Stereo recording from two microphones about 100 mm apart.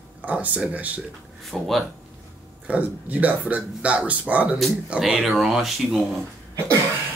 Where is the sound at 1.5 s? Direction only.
Centre (ahead or behind).